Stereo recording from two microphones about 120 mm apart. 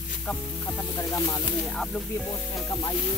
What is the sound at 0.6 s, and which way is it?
Music, 30° left (ahead or behind).